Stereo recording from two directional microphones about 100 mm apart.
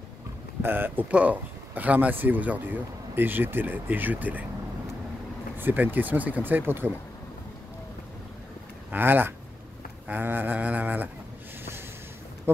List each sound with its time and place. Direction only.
0.6 s speech: 20° right (ahead or behind)
5.6 s speech: 20° right (ahead or behind)
8.9 s speech: 20° right (ahead or behind)